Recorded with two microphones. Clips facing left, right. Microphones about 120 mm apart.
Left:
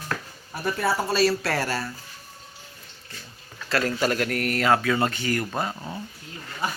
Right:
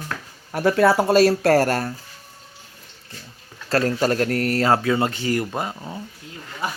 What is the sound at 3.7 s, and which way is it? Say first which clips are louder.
Speech: right 4 dB; 40° right (ahead or behind).